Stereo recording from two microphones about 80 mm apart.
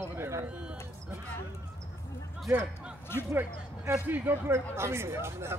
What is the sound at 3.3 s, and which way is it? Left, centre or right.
Speech, right.